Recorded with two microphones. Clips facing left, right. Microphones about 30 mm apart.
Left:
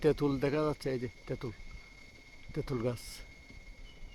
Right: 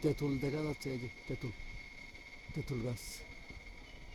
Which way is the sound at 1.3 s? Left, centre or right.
Centre.